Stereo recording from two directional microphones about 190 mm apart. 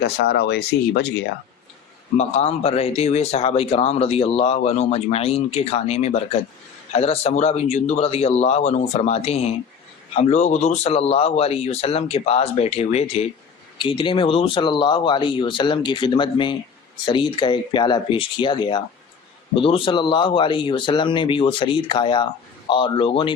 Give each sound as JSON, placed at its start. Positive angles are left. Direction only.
{"t": 0.2, "sound": "speech", "side_deg": 60}
{"t": 2.1, "sound": "speech", "side_deg": 35}